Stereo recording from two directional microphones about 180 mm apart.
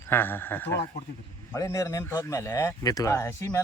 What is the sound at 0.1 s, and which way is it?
Speech, 10° left (ahead or behind).